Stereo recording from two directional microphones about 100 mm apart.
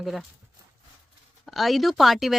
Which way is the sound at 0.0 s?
Centre (ahead or behind).